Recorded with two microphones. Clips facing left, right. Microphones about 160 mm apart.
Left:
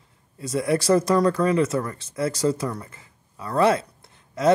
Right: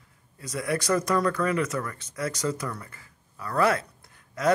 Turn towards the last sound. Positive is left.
turn(degrees=25)  # may be behind; listen again after turning